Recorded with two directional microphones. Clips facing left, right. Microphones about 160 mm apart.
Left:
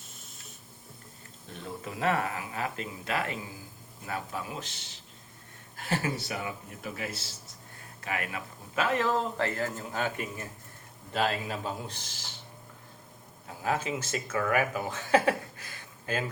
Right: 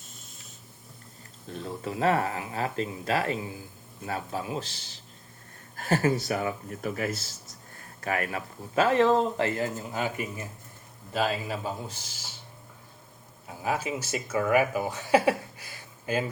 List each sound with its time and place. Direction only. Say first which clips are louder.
1.5 s speech: right 5 dB; 35° right (ahead or behind)
5.7 s speech: right 6 dB; 45° right (ahead or behind); by 12.3 s 5° right (ahead or behind)
13.6 s speech: right 1 dB; 10° right (ahead or behind)